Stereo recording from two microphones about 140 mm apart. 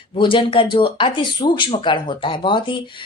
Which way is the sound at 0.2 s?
35° left (ahead or behind).